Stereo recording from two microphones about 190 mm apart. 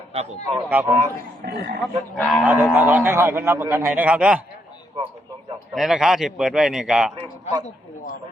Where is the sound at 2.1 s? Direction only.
5° left (ahead or behind).